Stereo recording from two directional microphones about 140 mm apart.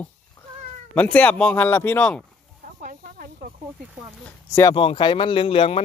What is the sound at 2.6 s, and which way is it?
Hiss, 70° right (ahead or behind).